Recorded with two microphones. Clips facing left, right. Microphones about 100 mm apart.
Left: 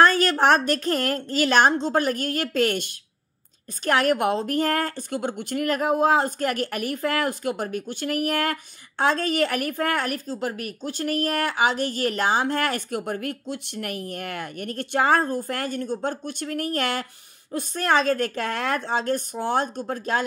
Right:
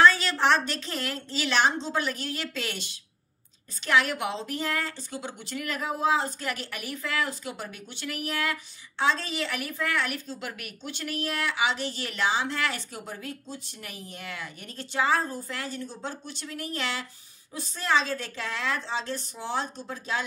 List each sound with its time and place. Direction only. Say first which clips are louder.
0.0 s a woman's voice: left 3 dB; 50° left (ahead or behind)